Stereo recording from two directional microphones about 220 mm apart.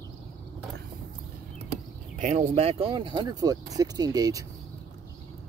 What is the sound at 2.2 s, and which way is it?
Speech, 35° right (ahead or behind).